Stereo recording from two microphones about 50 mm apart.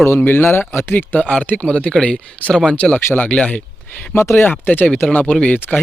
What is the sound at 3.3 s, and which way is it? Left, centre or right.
Speech, left.